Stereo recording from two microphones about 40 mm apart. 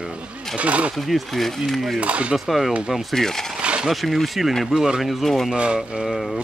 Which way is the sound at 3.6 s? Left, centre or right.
Right.